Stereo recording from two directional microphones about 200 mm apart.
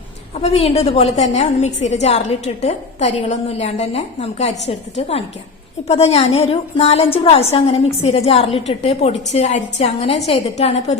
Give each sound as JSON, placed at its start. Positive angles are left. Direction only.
{"t": 0.3, "sound": "a woman's voice", "side_deg": 30}